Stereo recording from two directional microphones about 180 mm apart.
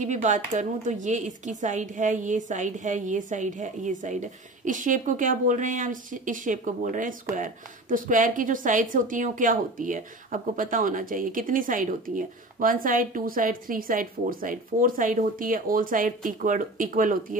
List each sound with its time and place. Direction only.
0.0 s a woman's voice: 40° right (ahead or behind)